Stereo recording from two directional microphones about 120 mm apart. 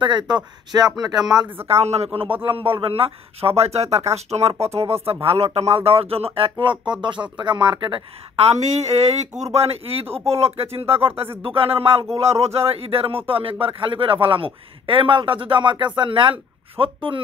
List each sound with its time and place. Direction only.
0.0 s speech: 40° right (ahead or behind)
1.7 s speech: 60° right (ahead or behind)
2.5 s speech: 50° right (ahead or behind)
8.4 s speech: 60° right (ahead or behind)